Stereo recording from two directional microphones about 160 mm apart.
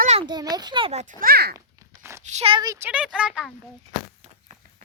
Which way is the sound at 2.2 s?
40° right (ahead or behind).